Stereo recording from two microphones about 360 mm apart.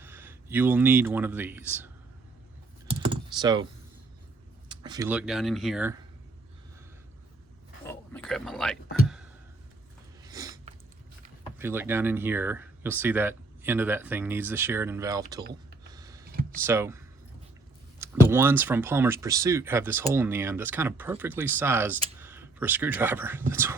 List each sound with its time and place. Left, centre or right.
0.0 s speech: centre
2.8 s computer keyboard: centre
4.7 s speech: centre
7.9 s a sound: centre
10.2 s a sound: centre
11.5 s speech: centre
15.9 s computer keyboard: centre
16.2 s a sound: right
16.6 s speech: centre
18.0 s speech: centre